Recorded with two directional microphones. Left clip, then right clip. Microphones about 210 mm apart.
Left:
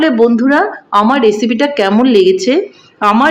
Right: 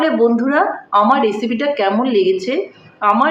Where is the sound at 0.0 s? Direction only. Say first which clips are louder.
Left 4 dB; 45° left (ahead or behind).